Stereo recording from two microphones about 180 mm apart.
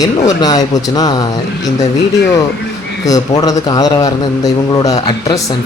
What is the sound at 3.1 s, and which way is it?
A man's voice, 20° left (ahead or behind).